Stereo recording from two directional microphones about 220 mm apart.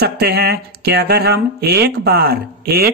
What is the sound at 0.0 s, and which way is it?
Speech, 45° right (ahead or behind).